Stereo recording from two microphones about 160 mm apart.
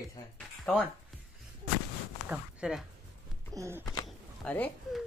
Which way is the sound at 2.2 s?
5° right (ahead or behind).